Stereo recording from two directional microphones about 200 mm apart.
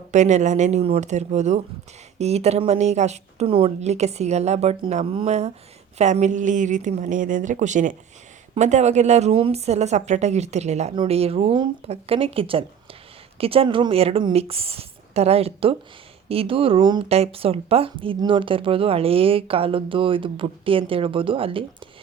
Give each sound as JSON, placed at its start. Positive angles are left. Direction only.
{"t": 0.1, "sound": "a woman's voice", "side_deg": -35}